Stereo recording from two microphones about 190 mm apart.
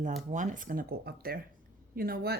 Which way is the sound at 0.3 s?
40° right (ahead or behind).